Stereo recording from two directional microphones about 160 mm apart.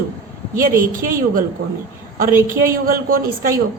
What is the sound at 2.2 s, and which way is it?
A woman's voice, 60° right (ahead or behind).